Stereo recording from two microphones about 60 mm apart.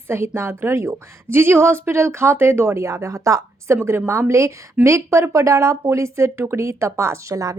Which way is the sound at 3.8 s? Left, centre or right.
Right.